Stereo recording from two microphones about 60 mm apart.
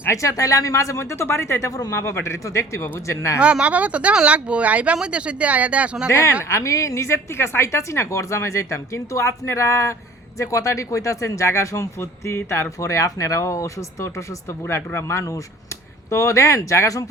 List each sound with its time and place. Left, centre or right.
0.1 s a woman's voice: left
2.1 s a woman's voice: left
3.4 s speech: right
6.1 s a woman's voice: left
12.8 s a woman's voice: left